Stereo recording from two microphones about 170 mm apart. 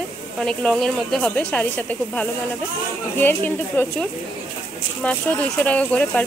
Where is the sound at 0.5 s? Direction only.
5° left (ahead or behind).